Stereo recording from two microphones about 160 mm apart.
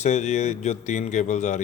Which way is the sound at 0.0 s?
45° left (ahead or behind).